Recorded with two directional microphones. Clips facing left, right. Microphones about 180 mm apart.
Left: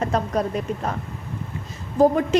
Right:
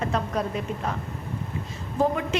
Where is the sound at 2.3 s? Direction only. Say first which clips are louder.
Left 8 dB; 40° left (ahead or behind).